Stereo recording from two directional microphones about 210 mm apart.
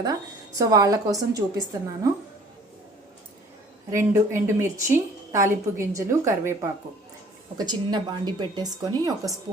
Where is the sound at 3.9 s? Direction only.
15° right (ahead or behind).